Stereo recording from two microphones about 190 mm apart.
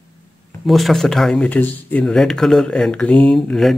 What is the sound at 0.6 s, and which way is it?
Speech, centre (ahead or behind).